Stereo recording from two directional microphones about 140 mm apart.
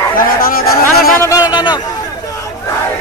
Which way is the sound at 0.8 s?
20° left (ahead or behind).